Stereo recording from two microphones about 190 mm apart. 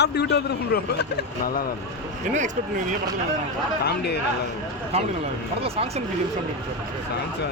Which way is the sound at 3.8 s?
60° left (ahead or behind).